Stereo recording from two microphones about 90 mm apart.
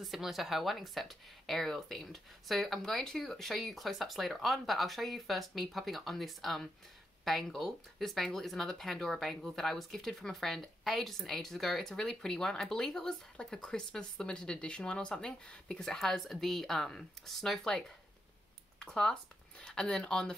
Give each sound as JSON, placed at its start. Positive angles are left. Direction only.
{"t": 0.0, "sound": "speech", "side_deg": 0}